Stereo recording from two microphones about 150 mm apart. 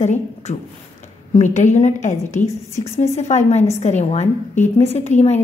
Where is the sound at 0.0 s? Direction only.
50° left (ahead or behind).